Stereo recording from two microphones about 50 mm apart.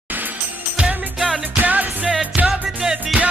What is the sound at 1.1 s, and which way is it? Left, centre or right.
Music, centre.